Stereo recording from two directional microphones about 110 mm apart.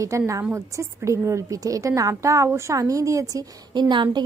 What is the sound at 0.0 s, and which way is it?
A woman's voice, 30° right (ahead or behind).